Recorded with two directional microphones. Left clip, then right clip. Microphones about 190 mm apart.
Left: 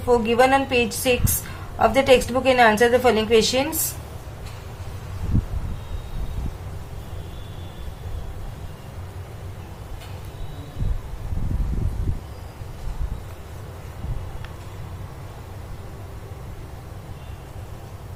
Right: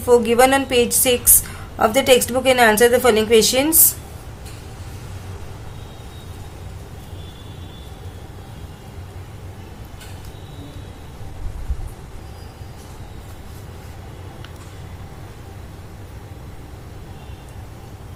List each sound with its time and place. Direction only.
0.1 s a woman's voice: 35° right (ahead or behind)